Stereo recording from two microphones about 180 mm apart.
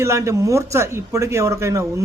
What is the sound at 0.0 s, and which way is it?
Speech, 15° right (ahead or behind).